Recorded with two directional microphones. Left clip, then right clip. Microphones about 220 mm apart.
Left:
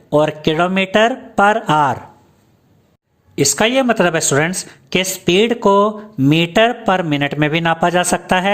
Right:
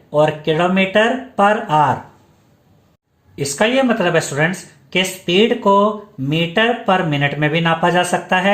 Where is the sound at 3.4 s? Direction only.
50° left (ahead or behind).